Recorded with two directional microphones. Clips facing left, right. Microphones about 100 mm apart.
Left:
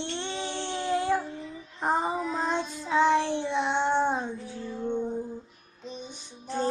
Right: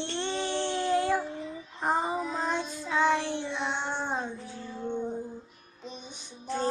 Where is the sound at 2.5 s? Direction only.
20° left (ahead or behind).